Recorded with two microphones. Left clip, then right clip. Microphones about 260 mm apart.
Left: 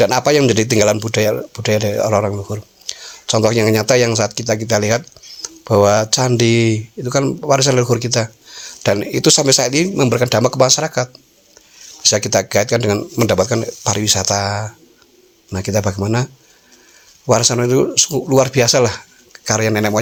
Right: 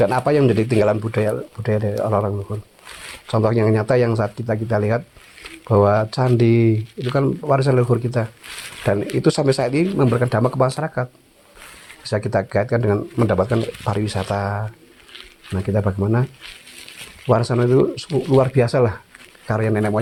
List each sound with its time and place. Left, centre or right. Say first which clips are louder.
0.0 s speech: left 4 dB; left